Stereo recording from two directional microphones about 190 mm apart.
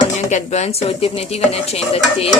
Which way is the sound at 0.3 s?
40° left (ahead or behind).